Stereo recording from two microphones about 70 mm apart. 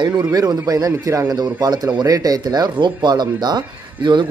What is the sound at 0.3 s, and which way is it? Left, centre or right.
A man's voice, right.